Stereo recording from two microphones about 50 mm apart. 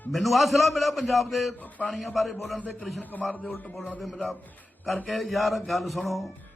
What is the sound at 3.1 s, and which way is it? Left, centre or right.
Speech, left.